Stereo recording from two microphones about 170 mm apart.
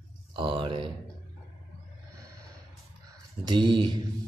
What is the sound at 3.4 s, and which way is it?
Speech, 25° right (ahead or behind).